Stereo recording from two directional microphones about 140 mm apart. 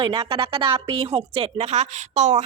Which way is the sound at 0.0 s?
35° right (ahead or behind).